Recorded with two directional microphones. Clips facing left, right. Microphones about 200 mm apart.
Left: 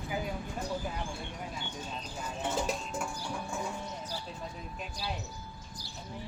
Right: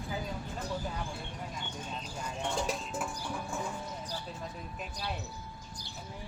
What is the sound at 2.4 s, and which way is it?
Music, centre (ahead or behind).